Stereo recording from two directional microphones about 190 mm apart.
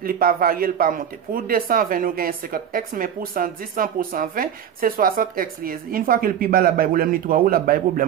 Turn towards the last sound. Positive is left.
turn(degrees=-50)  # may be behind; listen again after turning